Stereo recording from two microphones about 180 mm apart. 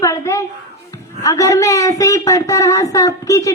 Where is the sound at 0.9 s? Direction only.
20° left (ahead or behind).